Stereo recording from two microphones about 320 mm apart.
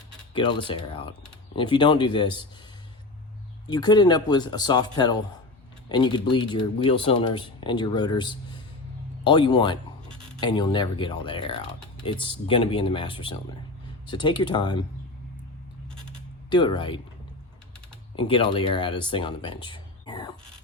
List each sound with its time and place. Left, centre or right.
0.3 s speech: centre
3.7 s speech: centre
16.5 s speech: centre
18.2 s speech: centre